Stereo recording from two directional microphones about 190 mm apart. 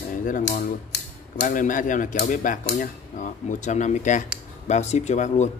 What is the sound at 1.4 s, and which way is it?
Speech, 45° left (ahead or behind).